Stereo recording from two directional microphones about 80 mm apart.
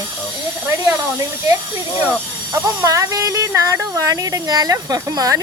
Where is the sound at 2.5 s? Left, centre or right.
Right.